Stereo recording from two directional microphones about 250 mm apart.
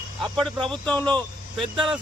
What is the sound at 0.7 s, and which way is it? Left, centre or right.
Speech, centre.